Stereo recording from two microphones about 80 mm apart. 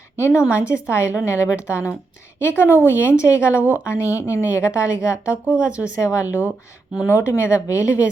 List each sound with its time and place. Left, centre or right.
0.2 s a woman's voice: left
3.5 s a woman's voice: right
3.8 s a woman's voice: left
5.3 s speech: centre
6.0 s a woman's voice: left